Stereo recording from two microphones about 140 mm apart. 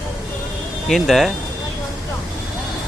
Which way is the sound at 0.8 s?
Centre (ahead or behind).